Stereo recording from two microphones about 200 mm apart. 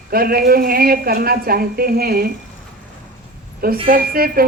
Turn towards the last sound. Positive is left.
turn(degrees=-50)  # may be behind; listen again after turning